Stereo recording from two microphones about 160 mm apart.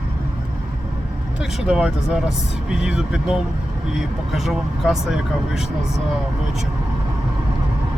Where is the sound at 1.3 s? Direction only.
5° right (ahead or behind).